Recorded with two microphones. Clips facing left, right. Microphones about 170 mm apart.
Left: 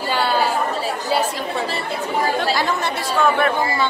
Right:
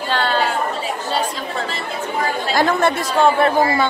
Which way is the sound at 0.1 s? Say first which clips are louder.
Even; 10° left (ahead or behind).